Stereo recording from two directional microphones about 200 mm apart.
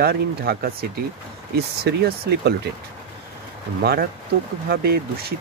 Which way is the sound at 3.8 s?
50° right (ahead or behind).